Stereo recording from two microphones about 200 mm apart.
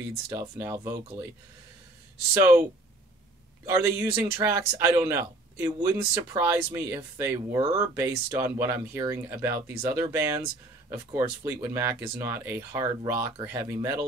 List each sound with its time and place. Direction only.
0.3 s speech: 15° right (ahead or behind)
3.6 s speech: 15° right (ahead or behind)